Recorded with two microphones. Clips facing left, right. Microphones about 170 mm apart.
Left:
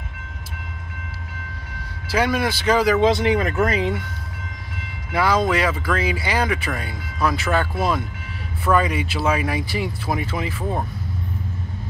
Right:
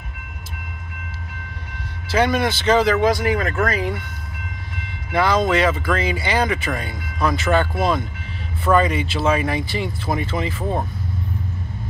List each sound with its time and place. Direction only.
2.0 s speech: 5° left (ahead or behind)
3.0 s speech: 25° left (ahead or behind)
5.1 s speech: 5° left (ahead or behind)